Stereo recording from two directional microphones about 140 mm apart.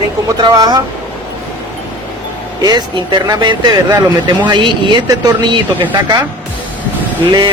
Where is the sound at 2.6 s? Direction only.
30° right (ahead or behind).